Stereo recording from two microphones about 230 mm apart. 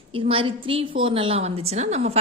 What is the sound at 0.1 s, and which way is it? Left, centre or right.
A woman's voice, right.